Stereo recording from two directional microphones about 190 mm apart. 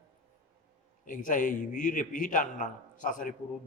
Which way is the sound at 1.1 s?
45° left (ahead or behind).